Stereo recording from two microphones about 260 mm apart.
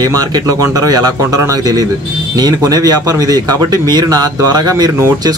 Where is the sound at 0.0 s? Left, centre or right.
Centre.